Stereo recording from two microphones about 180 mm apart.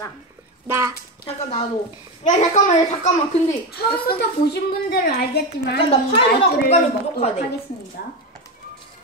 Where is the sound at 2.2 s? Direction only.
40° left (ahead or behind).